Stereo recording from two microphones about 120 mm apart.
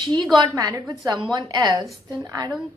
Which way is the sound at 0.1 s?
35° right (ahead or behind).